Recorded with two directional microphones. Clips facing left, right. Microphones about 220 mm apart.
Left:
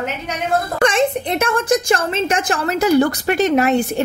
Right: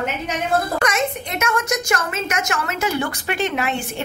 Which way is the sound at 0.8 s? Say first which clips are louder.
Left 6 dB; 30° left (ahead or behind).